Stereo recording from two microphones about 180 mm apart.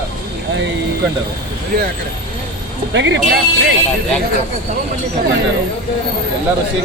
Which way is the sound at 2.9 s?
85° right.